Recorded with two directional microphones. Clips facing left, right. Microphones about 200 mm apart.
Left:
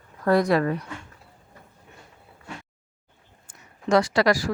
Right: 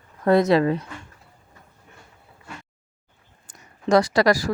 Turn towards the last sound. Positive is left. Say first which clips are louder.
# right 2 dB
turn(degrees=-40)  # may be behind; listen again after turning